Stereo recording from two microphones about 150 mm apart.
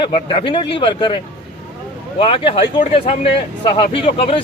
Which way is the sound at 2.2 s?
35° left (ahead or behind).